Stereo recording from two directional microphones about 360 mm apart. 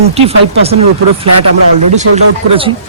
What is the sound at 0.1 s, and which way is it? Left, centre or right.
Speech, centre.